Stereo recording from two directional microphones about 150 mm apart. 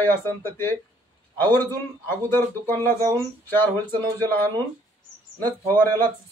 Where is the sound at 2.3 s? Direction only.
15° left (ahead or behind).